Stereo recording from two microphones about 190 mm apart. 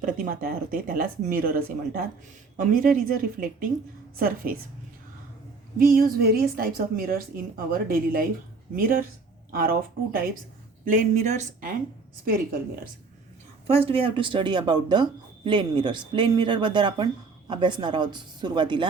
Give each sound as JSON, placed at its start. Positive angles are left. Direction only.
{"t": 0.0, "sound": "a woman's voice", "side_deg": -45}
{"t": 5.7, "sound": "a woman's voice", "side_deg": -50}
{"t": 13.7, "sound": "speech", "side_deg": -30}